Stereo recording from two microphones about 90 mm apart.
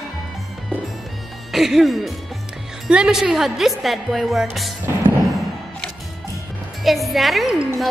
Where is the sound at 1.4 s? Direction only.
Centre (ahead or behind).